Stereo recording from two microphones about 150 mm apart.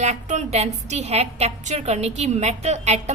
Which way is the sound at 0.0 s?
50° right (ahead or behind).